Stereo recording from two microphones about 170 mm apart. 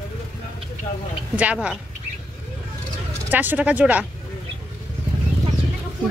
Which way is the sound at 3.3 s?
10° right (ahead or behind).